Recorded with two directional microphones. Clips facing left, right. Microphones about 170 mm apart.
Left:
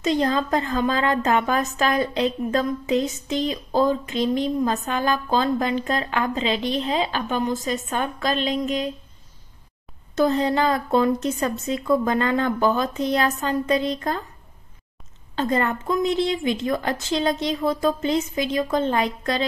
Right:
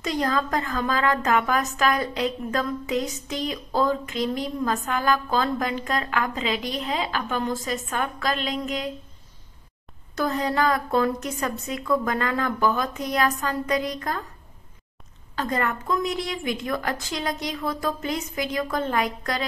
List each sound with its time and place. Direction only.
0.0 s a woman's voice: 25° left (ahead or behind)
10.1 s a woman's voice: 25° left (ahead or behind)
15.3 s a woman's voice: 25° left (ahead or behind)